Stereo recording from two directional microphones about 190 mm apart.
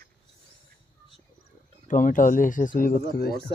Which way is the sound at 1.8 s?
45° left (ahead or behind).